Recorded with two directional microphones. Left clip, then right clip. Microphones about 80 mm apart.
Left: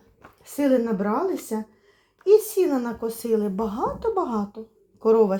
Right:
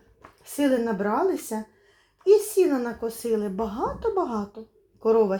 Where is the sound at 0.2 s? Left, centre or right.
Left.